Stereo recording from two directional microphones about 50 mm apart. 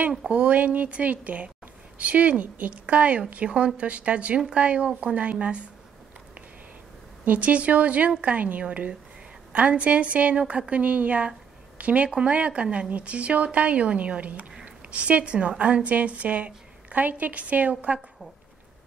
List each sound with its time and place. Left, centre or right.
0.3 s a woman's voice: right
7.2 s a woman's voice: right